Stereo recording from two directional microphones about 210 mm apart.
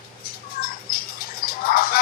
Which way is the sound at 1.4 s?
45° left (ahead or behind).